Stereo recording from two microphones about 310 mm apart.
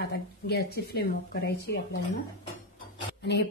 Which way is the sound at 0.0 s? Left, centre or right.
Left.